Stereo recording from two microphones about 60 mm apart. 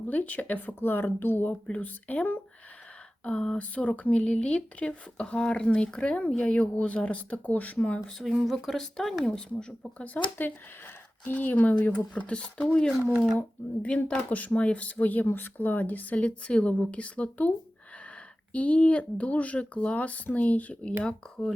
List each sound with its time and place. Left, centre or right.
0.1 s speech: left
3.2 s speech: centre
7.8 s speech: centre
8.2 s speech: centre
8.5 s speech: centre
10.4 s speech: left
13.8 s speech: left
18.5 s speech: left
21.0 s speech: centre